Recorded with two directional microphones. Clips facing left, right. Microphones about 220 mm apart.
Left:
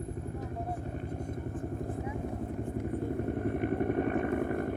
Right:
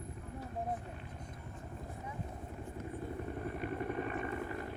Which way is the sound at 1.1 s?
50° left (ahead or behind).